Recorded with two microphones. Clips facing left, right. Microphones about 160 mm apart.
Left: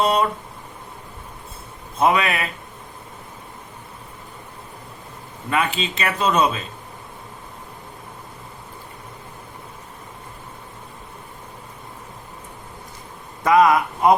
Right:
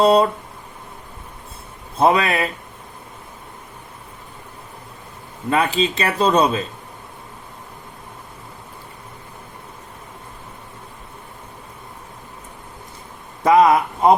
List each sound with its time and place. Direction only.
0.0 s a man's voice: 35° right (ahead or behind)
2.0 s a man's voice: 35° right (ahead or behind)
5.5 s a man's voice: 35° right (ahead or behind)
13.4 s speech: 25° right (ahead or behind)